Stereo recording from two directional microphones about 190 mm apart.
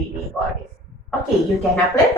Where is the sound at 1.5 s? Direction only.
Centre (ahead or behind).